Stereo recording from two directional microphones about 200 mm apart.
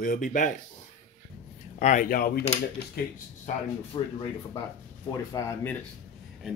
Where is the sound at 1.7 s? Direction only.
40° left (ahead or behind).